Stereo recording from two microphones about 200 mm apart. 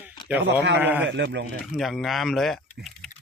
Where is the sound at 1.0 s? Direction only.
60° right (ahead or behind).